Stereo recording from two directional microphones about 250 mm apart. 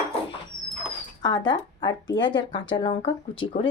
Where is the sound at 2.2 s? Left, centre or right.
Centre.